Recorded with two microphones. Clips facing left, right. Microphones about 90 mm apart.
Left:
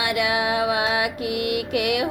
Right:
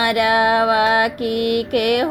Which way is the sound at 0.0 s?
60° right (ahead or behind).